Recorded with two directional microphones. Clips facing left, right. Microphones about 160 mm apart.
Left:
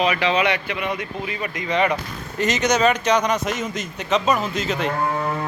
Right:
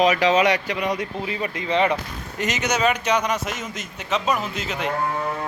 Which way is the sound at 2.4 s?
10° right (ahead or behind).